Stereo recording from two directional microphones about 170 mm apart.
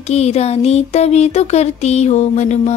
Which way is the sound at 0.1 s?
40° left (ahead or behind).